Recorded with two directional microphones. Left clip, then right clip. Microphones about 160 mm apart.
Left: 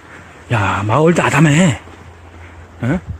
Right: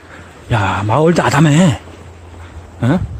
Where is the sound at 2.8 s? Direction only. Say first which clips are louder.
Right 3 dB; 10° right (ahead or behind).